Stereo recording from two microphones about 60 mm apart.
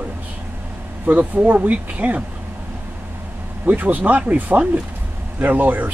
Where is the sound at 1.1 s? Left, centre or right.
Right.